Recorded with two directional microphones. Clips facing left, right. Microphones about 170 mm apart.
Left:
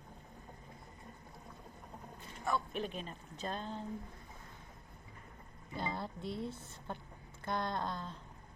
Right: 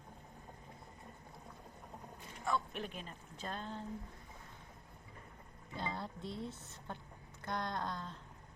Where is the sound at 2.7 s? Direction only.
25° left (ahead or behind).